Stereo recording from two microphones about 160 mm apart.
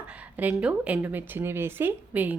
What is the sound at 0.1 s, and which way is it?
Speech, 10° right (ahead or behind).